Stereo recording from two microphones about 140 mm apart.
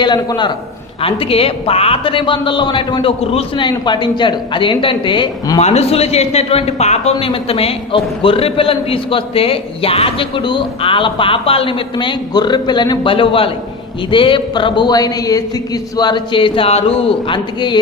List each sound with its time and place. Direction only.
0.0 s a man's voice: 30° left (ahead or behind)
1.0 s a man's voice: 40° left (ahead or behind)
5.5 s a man's voice: 50° left (ahead or behind); by 17.7 s 35° left (ahead or behind)